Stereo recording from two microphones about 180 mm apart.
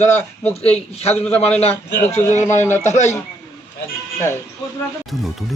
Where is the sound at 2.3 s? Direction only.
40° left (ahead or behind).